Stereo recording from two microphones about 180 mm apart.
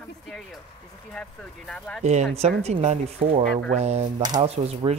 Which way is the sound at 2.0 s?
40° right (ahead or behind).